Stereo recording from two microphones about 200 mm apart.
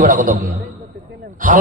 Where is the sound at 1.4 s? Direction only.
40° right (ahead or behind).